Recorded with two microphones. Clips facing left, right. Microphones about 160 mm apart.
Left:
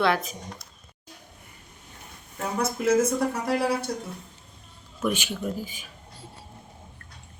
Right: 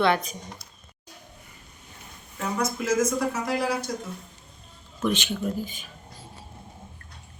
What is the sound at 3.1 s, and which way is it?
Speech, 60° left (ahead or behind).